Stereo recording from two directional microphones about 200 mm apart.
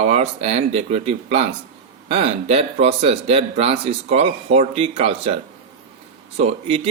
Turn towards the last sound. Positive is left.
turn(degrees=-30)  # may be behind; listen again after turning